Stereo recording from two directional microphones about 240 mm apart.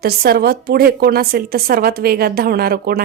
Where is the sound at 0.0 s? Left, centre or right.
Right.